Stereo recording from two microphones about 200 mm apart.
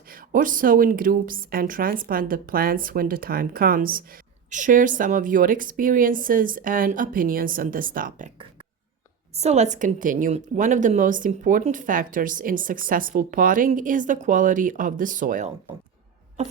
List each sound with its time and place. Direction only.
0.1 s speech: 40° right (ahead or behind)
9.3 s a woman's voice: 30° right (ahead or behind)